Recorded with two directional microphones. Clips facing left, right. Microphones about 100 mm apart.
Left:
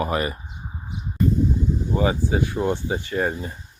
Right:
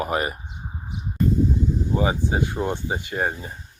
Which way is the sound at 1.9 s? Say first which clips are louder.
Left 2 dB; 20° right (ahead or behind).